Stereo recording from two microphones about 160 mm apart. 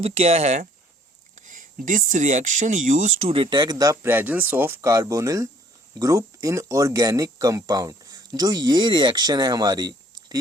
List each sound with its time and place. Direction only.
0.0 s speech: 40° right (ahead or behind); by 3.1 s 55° right (ahead or behind)
3.2 s speech: 35° right (ahead or behind)